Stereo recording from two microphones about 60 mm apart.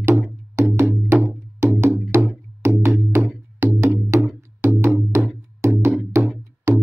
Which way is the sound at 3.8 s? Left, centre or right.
Right.